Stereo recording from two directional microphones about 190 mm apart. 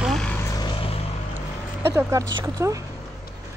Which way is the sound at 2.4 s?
15° right (ahead or behind).